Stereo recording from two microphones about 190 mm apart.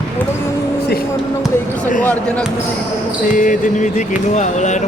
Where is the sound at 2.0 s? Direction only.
5° left (ahead or behind).